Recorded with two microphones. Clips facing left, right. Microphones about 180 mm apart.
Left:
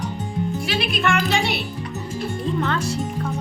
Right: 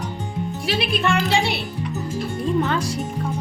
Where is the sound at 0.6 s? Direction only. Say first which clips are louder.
Right 4 dB; 30° right (ahead or behind).